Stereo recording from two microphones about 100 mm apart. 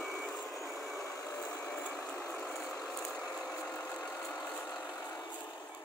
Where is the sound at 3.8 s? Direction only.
15° left (ahead or behind).